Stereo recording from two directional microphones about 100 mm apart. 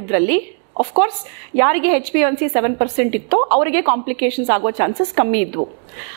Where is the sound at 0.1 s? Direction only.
15° right (ahead or behind).